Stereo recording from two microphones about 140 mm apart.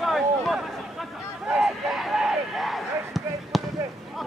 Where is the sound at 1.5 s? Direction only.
5° right (ahead or behind).